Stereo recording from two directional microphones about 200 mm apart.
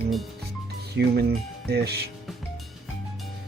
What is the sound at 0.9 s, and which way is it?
Speech, 50° right (ahead or behind).